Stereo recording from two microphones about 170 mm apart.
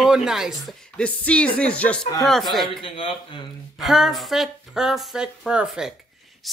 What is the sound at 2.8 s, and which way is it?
Speech, 30° left (ahead or behind).